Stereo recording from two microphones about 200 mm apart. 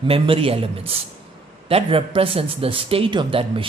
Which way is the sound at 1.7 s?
30° right (ahead or behind).